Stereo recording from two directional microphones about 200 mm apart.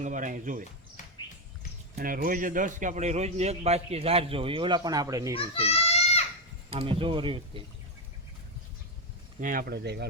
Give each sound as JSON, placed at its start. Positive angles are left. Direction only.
{"t": 0.0, "sound": "a man's voice", "side_deg": -40}
{"t": 2.0, "sound": "a man's voice", "side_deg": -45}
{"t": 5.3, "sound": "children playing", "side_deg": 30}
{"t": 6.7, "sound": "speech", "side_deg": -25}
{"t": 9.4, "sound": "speech", "side_deg": -45}